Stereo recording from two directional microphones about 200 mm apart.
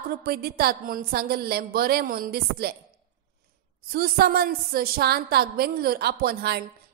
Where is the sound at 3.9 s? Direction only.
50° right (ahead or behind).